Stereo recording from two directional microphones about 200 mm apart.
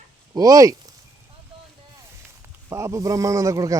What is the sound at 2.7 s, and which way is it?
A man's voice, 15° right (ahead or behind).